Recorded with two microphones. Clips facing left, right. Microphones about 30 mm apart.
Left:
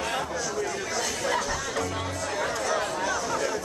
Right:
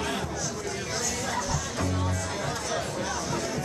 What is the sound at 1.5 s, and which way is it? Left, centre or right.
Music, left.